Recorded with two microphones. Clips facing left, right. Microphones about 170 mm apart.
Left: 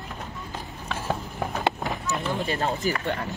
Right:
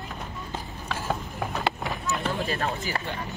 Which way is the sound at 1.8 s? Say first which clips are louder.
Left 1 dB; centre (ahead or behind).